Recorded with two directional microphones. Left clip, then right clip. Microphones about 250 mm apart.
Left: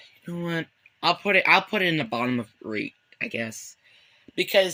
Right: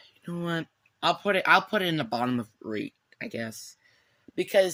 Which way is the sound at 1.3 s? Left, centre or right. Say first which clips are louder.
Left 2 dB; centre.